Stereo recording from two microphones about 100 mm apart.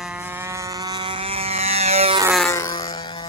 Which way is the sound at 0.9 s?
55° right (ahead or behind).